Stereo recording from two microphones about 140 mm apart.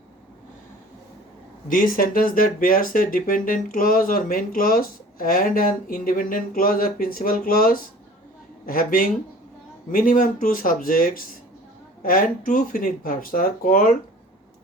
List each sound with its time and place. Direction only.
1.6 s speech: 80° left